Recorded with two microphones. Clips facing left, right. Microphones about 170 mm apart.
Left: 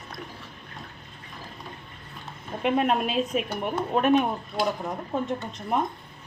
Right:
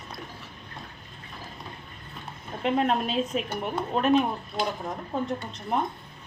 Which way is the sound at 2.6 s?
10° left (ahead or behind).